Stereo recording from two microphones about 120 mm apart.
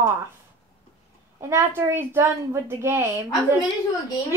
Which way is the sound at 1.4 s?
20° right (ahead or behind).